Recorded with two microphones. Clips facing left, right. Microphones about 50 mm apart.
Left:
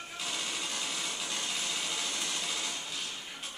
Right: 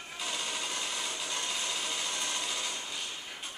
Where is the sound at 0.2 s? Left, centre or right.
Centre.